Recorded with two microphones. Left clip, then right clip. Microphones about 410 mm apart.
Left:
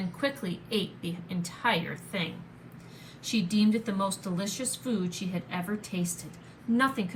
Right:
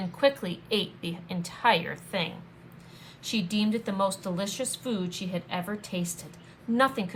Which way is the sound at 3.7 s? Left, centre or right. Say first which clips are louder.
Right 2 dB; centre.